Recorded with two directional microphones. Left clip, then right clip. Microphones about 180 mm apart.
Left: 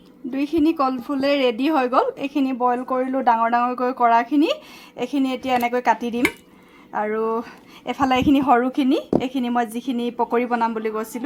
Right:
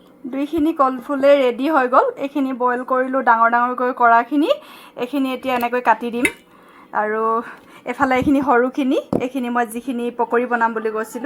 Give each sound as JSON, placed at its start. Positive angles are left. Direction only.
{"t": 0.3, "sound": "a woman's voice", "side_deg": 25}